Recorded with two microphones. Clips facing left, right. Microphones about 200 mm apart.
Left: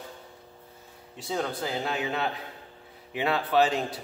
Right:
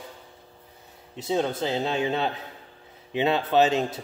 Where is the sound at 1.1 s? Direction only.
20° right (ahead or behind).